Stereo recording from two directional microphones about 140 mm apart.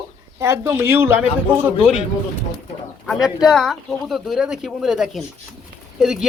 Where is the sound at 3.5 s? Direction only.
5° left (ahead or behind).